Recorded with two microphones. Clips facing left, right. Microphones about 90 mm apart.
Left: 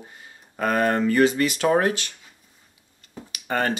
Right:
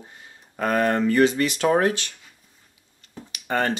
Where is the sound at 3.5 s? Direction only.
20° right (ahead or behind).